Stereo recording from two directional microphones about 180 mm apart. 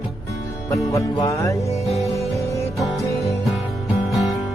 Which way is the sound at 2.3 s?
15° left (ahead or behind).